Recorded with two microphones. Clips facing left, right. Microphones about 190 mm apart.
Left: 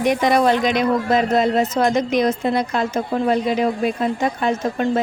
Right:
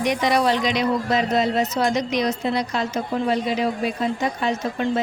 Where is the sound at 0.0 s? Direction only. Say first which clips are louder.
Left 4 dB; 50° left (ahead or behind).